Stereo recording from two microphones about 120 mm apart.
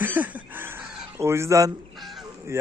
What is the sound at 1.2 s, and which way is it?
Speech, 20° right (ahead or behind).